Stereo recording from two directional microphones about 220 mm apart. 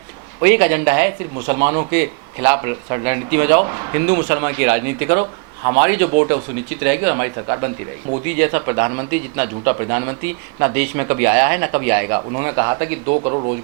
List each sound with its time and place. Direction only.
0.4 s speech: 15° right (ahead or behind)
1.5 s a man's voice: 30° right (ahead or behind)
1.9 s speech: 15° right (ahead or behind)
5.2 s speech: 25° right (ahead or behind)
5.8 s a man's voice: 15° right (ahead or behind)
13.1 s speech: 30° right (ahead or behind)